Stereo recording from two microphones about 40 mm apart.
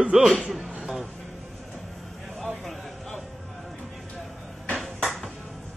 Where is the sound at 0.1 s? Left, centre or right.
Centre.